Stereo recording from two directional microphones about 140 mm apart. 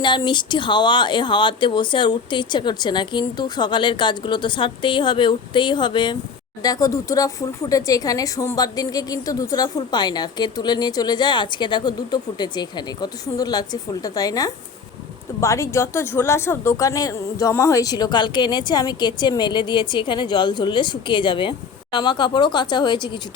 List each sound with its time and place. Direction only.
0.0 s a woman's voice: 35° left (ahead or behind)